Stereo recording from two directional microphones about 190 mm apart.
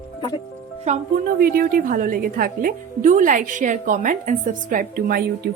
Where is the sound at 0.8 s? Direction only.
50° right (ahead or behind).